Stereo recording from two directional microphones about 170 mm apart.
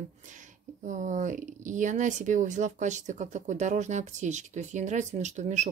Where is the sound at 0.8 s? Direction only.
50° right (ahead or behind).